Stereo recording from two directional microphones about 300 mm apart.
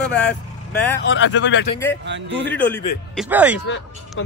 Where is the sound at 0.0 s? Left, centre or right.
Centre.